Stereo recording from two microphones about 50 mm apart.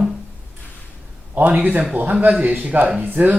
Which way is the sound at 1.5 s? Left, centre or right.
Right.